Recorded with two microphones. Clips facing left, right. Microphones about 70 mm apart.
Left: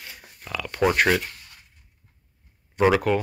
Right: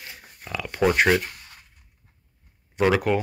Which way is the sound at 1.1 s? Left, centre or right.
Centre.